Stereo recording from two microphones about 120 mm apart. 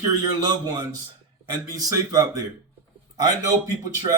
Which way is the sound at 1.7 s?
30° right (ahead or behind).